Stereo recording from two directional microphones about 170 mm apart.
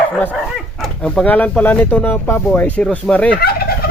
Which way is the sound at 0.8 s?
5° left (ahead or behind).